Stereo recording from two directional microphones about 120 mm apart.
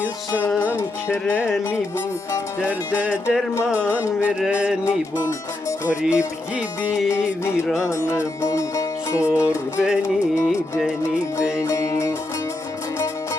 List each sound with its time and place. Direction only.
0.7 s music: 20° left (ahead or behind)
2.6 s music: 10° right (ahead or behind)
4.9 s speech: 25° left (ahead or behind)
6.0 s music: 10° right (ahead or behind)
7.9 s music: 25° left (ahead or behind)
9.7 s music: 5° right (ahead or behind)
11.5 s music: 25° left (ahead or behind)